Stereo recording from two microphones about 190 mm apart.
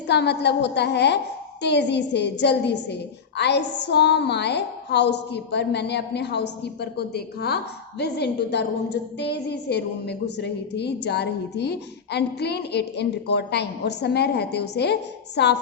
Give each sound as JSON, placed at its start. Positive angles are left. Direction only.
{"t": 0.1, "sound": "a woman's voice", "side_deg": 60}